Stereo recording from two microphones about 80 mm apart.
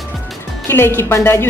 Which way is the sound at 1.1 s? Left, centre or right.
Left.